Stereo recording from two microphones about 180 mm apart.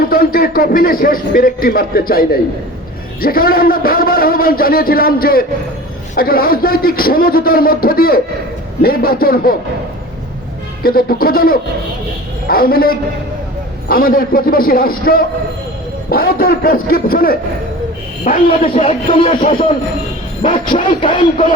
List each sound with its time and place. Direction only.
0.0 s a man's voice: 55° left (ahead or behind)
10.8 s a man's voice: 55° left (ahead or behind); by 19.4 s 35° left (ahead or behind)
20.4 s speech: 30° left (ahead or behind)